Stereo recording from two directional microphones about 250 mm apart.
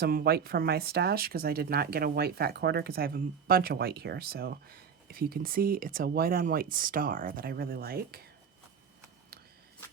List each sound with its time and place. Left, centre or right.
0.0 s speech: right